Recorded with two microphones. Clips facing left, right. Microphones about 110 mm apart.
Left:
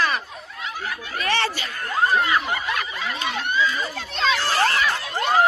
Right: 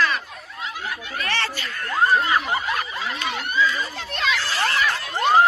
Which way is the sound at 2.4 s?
30° right (ahead or behind).